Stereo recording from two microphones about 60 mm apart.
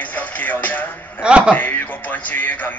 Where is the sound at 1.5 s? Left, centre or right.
Left.